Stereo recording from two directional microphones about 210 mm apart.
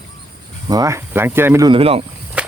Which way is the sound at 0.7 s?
15° right (ahead or behind).